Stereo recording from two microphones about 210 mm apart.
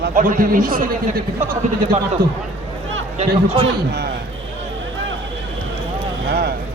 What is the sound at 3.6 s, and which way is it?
Speech, 55° right (ahead or behind).